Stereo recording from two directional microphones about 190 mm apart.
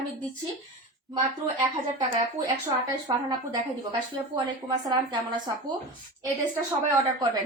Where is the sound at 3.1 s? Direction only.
25° right (ahead or behind).